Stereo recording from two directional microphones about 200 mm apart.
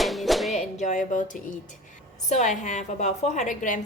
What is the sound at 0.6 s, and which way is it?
A woman's voice, 35° left (ahead or behind).